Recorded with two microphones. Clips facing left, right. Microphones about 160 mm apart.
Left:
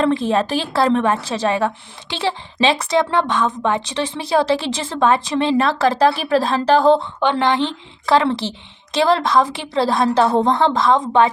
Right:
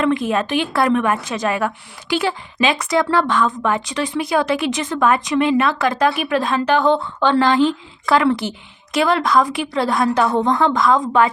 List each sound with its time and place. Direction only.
0.0 s a woman's voice: 30° left (ahead or behind)
7.2 s a woman's voice: 20° left (ahead or behind)